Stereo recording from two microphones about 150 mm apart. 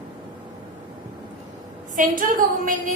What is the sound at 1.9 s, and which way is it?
Speech, 65° right (ahead or behind).